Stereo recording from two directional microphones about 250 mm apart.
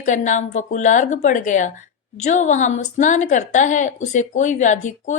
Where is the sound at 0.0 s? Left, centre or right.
Left.